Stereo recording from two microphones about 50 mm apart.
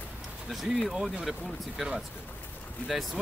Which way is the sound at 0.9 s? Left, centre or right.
Centre.